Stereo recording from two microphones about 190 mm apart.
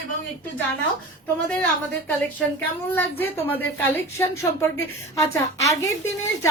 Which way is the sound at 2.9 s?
10° left (ahead or behind).